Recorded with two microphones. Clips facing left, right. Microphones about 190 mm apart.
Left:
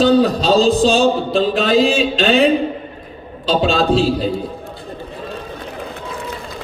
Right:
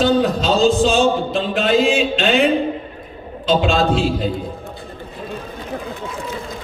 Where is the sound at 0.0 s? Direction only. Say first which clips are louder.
Left 3 dB; 35° left (ahead or behind).